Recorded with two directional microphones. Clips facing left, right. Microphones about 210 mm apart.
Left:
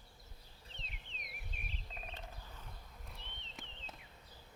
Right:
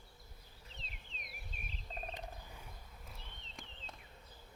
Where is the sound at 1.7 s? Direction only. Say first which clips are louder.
Right 6 dB; 40° right (ahead or behind).